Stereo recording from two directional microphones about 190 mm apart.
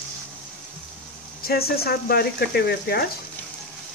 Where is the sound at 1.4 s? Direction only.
55° left (ahead or behind).